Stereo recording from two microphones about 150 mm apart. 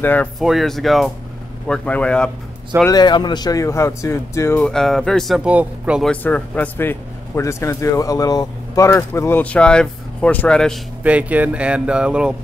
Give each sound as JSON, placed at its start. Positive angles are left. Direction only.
{"t": 0.0, "sound": "a man's voice", "side_deg": 10}
{"t": 0.4, "sound": "a man's voice", "side_deg": 0}
{"t": 2.9, "sound": "speech", "side_deg": 30}
{"t": 4.6, "sound": "speech", "side_deg": 5}
{"t": 6.0, "sound": "a man's voice", "side_deg": 10}
{"t": 11.1, "sound": "speech", "side_deg": -10}